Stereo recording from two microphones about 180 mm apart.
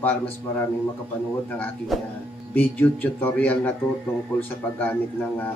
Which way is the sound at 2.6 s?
10° left (ahead or behind).